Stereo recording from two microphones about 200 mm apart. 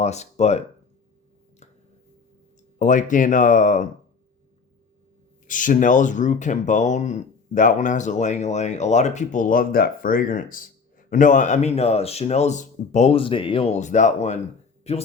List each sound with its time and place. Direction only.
0.0 s speech: 35° left (ahead or behind)
2.7 s speech: 40° left (ahead or behind)
5.5 s speech: 40° left (ahead or behind)